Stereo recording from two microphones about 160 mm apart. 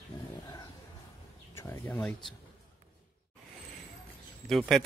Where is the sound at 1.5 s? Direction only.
15° left (ahead or behind).